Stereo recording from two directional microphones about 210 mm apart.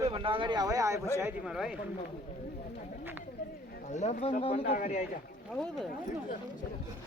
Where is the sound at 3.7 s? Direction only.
35° left (ahead or behind).